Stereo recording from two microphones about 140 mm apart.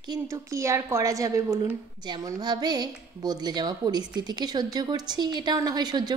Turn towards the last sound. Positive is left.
turn(degrees=-30)  # may be behind; listen again after turning